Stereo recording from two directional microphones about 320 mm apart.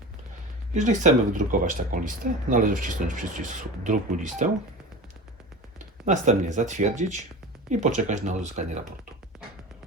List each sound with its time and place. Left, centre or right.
0.7 s speech: right
6.1 s speech: right